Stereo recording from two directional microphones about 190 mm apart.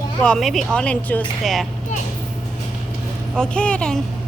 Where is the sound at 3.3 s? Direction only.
5° left (ahead or behind).